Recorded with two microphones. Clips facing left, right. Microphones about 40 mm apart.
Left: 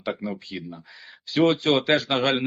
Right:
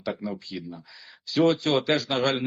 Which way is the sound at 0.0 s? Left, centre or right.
Left.